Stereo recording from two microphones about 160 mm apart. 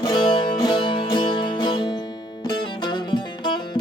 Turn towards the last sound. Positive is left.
turn(degrees=30)  # may be behind; listen again after turning